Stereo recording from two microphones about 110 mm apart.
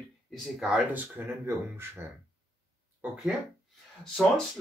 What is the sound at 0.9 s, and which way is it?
Speech, 20° right (ahead or behind).